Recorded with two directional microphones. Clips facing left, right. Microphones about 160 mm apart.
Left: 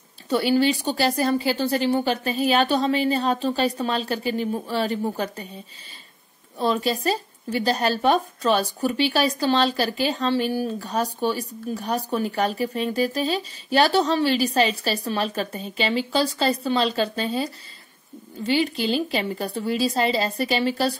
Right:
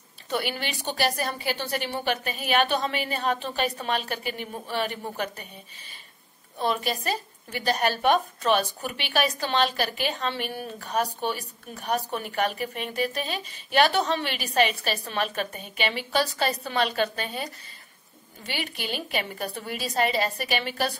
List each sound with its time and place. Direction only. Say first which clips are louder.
0.3 s speech: left 10 dB; 30° left (ahead or behind)
6.6 s a woman's voice: left 5 dB; 30° left (ahead or behind)